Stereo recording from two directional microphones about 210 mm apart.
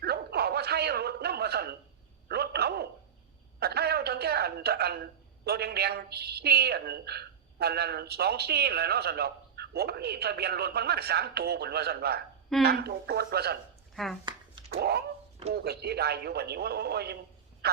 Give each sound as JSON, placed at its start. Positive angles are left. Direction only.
{"t": 0.0, "sound": "bow-wow", "side_deg": -50}
{"t": 2.3, "sound": "a sound", "side_deg": -50}
{"t": 5.5, "sound": "a woman's voice", "side_deg": -50}
{"t": 13.9, "sound": "speech", "side_deg": 0}
{"t": 14.8, "sound": "dog", "side_deg": -50}
{"t": 15.5, "sound": "a woman's voice", "side_deg": -50}